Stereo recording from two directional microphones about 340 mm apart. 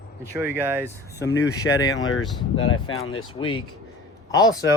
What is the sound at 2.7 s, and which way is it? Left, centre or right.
Speech, left.